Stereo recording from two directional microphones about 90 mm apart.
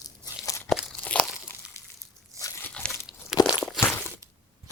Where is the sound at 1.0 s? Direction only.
15° left (ahead or behind).